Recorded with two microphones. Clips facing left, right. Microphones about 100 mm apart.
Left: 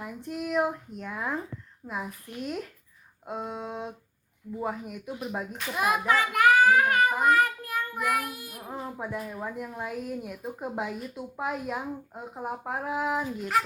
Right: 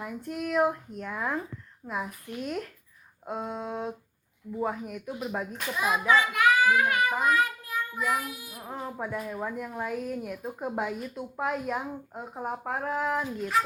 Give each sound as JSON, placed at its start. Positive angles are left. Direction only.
{"t": 0.0, "sound": "speech", "side_deg": 0}
{"t": 5.7, "sound": "a child's voice", "side_deg": 55}
{"t": 6.3, "sound": "child singing", "side_deg": 45}
{"t": 7.2, "sound": "a child's voice", "side_deg": 50}
{"t": 8.6, "sound": "speech", "side_deg": 0}